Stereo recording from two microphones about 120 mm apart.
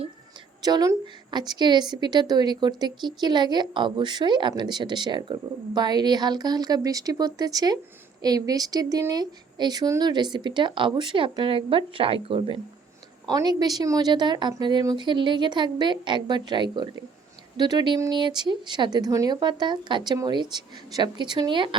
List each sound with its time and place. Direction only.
0.6 s a woman's voice: 30° right (ahead or behind); by 12.5 s 50° right (ahead or behind)
13.2 s a woman's voice: 35° right (ahead or behind)